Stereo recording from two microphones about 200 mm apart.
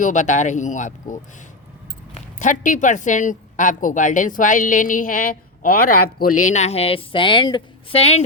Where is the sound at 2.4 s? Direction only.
40° left (ahead or behind).